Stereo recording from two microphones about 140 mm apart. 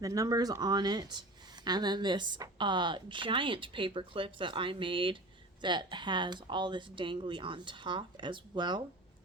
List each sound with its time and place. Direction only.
0.0 s speech: 25° right (ahead or behind)